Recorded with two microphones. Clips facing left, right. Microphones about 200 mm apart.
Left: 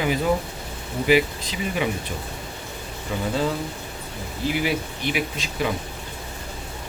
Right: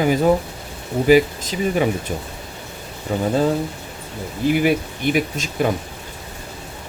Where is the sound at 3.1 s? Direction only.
40° right (ahead or behind).